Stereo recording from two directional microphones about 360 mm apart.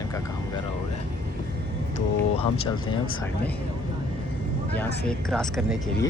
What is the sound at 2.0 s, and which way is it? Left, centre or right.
Speech, centre.